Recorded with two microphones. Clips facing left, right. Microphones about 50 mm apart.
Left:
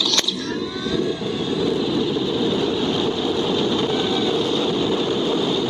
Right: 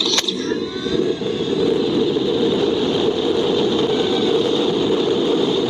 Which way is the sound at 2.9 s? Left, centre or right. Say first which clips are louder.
Right 3 dB; right.